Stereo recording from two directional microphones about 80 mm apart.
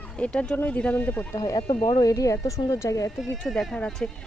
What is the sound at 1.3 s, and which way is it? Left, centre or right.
Speech, left.